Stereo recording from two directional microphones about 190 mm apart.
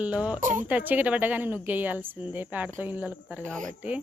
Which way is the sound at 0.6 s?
10° right (ahead or behind).